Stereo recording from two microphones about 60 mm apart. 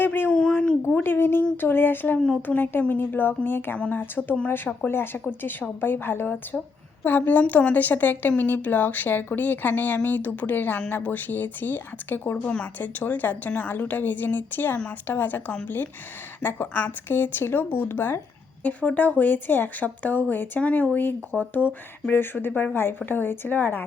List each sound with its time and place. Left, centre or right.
0.0 s a sound: left
0.3 s a sound: centre
1.0 s a woman's voice: left
2.1 s speech: centre
2.6 s a woman's voice: left
3.8 s speech: left
4.4 s a woman's voice: left
18.6 s a woman's voice: left